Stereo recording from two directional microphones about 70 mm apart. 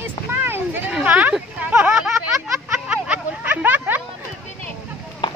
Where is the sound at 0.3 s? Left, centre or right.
Right.